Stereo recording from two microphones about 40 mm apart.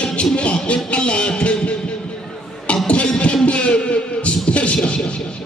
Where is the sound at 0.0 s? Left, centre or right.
Left.